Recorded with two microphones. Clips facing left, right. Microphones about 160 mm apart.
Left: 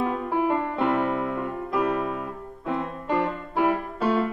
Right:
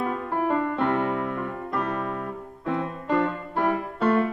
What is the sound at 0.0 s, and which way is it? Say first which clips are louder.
Music: left 2 dB; 5° left (ahead or behind).